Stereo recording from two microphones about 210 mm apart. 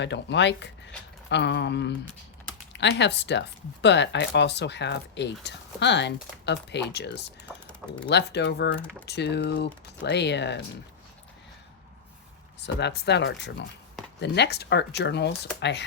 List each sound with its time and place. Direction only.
0.0 s speech: 55° left (ahead or behind)
7.5 s speech: 5° right (ahead or behind)
8.1 s speech: 55° left (ahead or behind)
12.5 s speech: 55° left (ahead or behind)